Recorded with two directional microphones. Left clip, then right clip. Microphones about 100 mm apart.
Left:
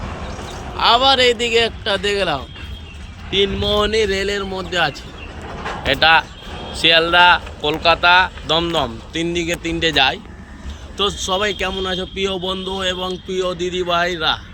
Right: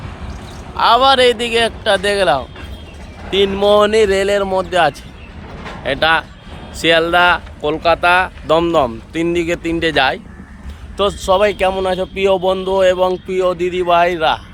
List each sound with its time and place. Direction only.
0.8 s a man's voice: 15° right (ahead or behind)
5.5 s a sound: 35° left (ahead or behind)
5.8 s a man's voice: 20° right (ahead or behind)